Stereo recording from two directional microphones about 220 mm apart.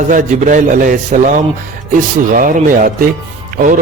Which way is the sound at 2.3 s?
35° right (ahead or behind).